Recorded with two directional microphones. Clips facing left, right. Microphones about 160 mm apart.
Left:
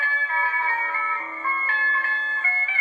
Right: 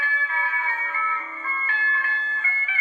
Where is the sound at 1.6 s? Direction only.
40° left (ahead or behind).